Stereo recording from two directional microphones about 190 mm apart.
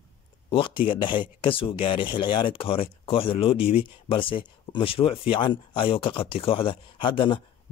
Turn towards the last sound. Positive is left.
turn(degrees=25)  # may be behind; listen again after turning